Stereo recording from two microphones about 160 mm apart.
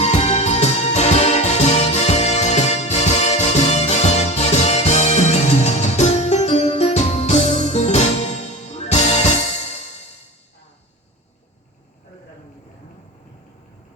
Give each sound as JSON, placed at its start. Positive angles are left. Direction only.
{"t": 0.0, "sound": "music", "side_deg": 45}